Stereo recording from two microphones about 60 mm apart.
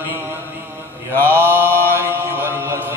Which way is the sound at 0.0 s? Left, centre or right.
Right.